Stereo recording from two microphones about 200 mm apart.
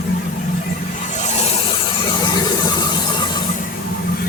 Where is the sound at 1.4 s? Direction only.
30° left (ahead or behind).